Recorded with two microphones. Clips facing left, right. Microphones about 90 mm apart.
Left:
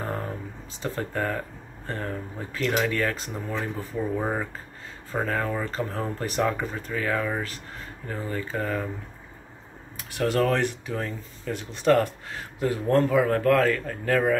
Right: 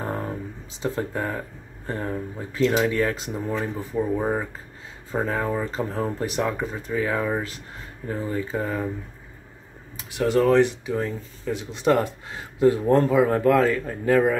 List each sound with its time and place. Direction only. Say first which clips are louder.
0.0 s a sound: right 2 dB; 20° right (ahead or behind)
0.8 s speech: right 2 dB; 15° right (ahead or behind)
5.1 s speech: right 2 dB; 15° right (ahead or behind)
10.3 s speech: right 7 dB; 15° right (ahead or behind)